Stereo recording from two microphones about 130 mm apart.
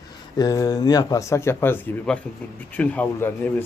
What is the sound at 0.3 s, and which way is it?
Speech, 25° left (ahead or behind).